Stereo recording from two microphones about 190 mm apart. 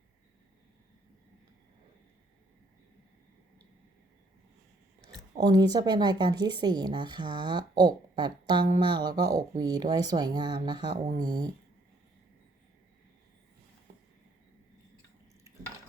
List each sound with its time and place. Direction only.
5.4 s speech: 20° right (ahead or behind)